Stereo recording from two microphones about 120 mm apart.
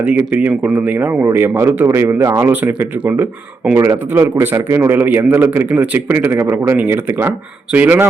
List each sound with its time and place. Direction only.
0.0 s a man's voice: 15° right (ahead or behind)
3.8 s a man's voice: 25° right (ahead or behind)